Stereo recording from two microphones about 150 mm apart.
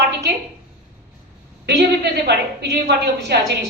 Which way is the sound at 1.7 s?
90° right.